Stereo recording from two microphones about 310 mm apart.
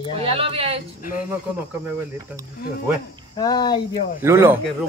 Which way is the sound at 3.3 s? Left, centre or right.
Centre.